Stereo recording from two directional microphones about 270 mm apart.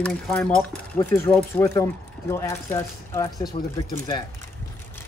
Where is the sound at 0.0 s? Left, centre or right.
Centre.